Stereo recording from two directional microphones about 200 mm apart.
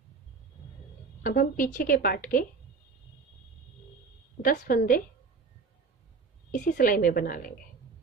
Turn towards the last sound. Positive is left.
turn(degrees=45)  # may be behind; listen again after turning